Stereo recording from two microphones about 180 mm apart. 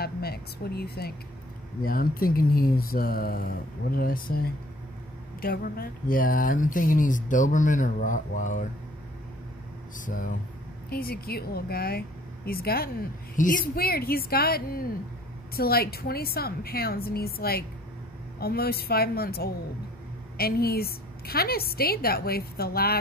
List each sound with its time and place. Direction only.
0.0 s a sound: 60° left (ahead or behind)
1.9 s a woman's voice: 55° left (ahead or behind)
9.9 s speech: 45° left (ahead or behind)
10.9 s a woman's voice: 55° left (ahead or behind)